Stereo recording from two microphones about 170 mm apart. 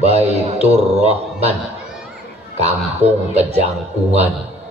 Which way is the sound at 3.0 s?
40° right (ahead or behind).